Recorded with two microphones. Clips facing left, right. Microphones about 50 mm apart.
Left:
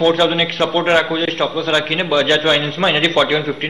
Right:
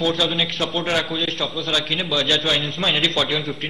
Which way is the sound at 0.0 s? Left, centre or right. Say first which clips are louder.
Left 7 dB; left.